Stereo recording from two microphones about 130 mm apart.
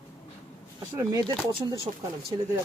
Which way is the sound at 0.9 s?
25° right (ahead or behind).